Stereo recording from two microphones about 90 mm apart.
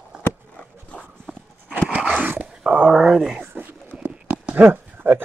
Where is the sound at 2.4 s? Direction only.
10° right (ahead or behind).